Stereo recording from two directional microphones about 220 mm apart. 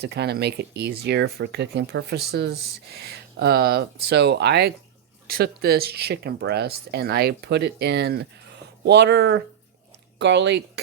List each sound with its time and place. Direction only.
0.0 s speech: 50° right (ahead or behind)